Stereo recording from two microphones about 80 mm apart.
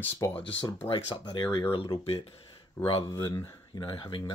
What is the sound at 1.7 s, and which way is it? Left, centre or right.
Speech, left.